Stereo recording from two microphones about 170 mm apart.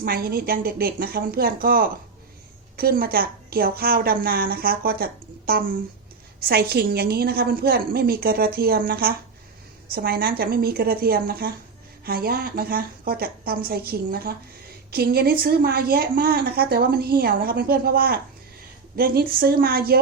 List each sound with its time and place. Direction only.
0.0 s a woman's voice: 60° right (ahead or behind)